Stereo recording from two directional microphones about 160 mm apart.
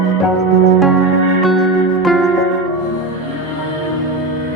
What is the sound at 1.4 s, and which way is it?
Music, centre (ahead or behind).